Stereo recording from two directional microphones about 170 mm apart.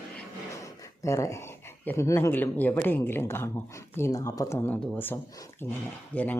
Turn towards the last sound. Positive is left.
turn(degrees=10)  # may be behind; listen again after turning